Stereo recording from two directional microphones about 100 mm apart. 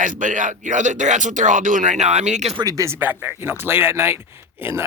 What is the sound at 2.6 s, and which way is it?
Speech, 35° right (ahead or behind).